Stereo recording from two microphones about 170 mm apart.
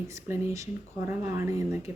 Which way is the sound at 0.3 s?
15° right (ahead or behind).